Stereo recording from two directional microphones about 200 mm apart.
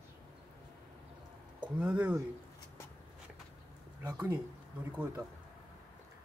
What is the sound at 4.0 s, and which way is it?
Speech, 10° right (ahead or behind).